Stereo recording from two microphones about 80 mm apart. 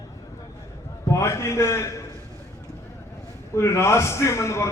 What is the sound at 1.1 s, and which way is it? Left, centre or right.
Speech, left.